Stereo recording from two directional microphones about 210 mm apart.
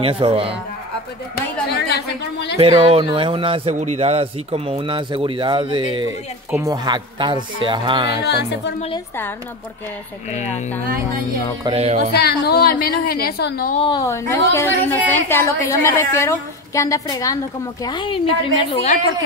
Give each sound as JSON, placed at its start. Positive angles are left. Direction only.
{"t": 0.0, "sound": "speech", "side_deg": -25}
{"t": 1.3, "sound": "a woman's voice", "side_deg": 50}
{"t": 2.6, "sound": "speech", "side_deg": -25}
{"t": 8.1, "sound": "a woman's voice", "side_deg": 55}
{"t": 10.3, "sound": "speech", "side_deg": 35}
{"t": 11.6, "sound": "speech", "side_deg": -30}
{"t": 12.1, "sound": "a woman's voice", "side_deg": 50}
{"t": 13.7, "sound": "a woman's voice", "side_deg": 20}